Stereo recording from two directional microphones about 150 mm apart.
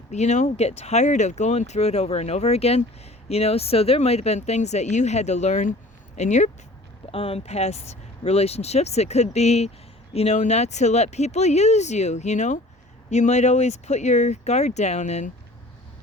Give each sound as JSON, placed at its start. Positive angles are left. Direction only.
{"t": 0.1, "sound": "speech", "side_deg": 50}
{"t": 7.1, "sound": "speech", "side_deg": 40}